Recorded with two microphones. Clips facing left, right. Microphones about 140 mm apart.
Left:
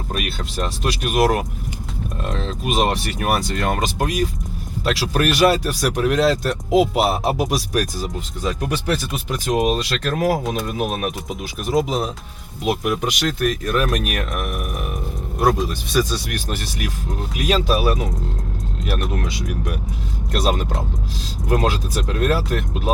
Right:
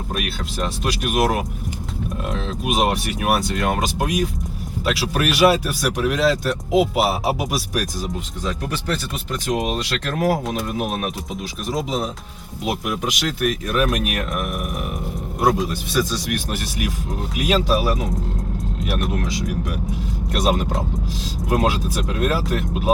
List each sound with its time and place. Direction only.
0.1 s speech: centre (ahead or behind)